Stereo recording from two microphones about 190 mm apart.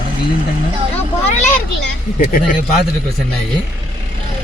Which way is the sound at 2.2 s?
40° left (ahead or behind).